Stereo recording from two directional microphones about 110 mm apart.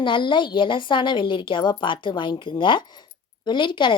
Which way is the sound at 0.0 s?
45° left (ahead or behind).